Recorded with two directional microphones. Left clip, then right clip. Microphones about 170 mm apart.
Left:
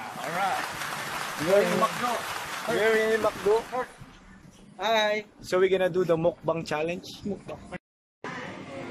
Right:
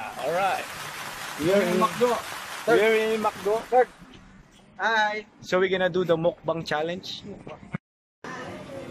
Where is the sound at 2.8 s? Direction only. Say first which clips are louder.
Right 2 dB; 5° right (ahead or behind).